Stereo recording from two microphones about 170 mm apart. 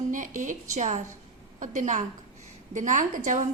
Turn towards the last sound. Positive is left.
turn(degrees=-50)  # may be behind; listen again after turning